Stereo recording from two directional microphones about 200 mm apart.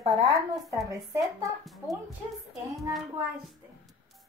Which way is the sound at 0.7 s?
15° right (ahead or behind).